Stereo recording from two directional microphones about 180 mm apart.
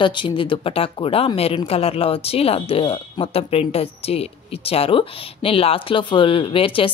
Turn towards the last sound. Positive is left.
turn(degrees=30)  # may be behind; listen again after turning